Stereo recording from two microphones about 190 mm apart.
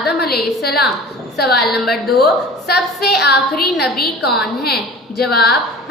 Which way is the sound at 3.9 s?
55° left (ahead or behind).